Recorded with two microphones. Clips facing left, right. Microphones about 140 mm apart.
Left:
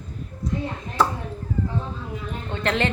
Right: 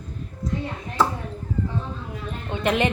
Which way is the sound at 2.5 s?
15° right (ahead or behind).